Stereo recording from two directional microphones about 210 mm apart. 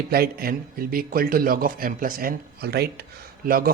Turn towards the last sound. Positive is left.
turn(degrees=-45)  # may be behind; listen again after turning